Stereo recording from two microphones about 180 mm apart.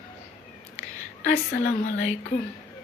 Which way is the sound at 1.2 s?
55° left (ahead or behind).